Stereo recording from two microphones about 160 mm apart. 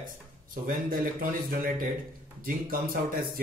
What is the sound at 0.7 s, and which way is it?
Speech, 60° right (ahead or behind).